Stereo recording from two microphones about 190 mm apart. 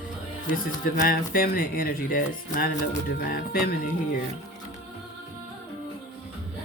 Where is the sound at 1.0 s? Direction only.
50° left (ahead or behind).